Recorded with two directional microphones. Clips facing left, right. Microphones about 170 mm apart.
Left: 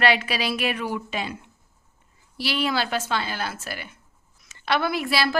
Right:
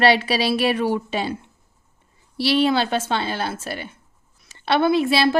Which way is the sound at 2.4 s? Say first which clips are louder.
Right 7 dB; 30° right (ahead or behind).